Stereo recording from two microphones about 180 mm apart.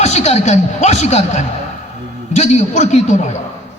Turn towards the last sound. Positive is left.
turn(degrees=40)  # may be behind; listen again after turning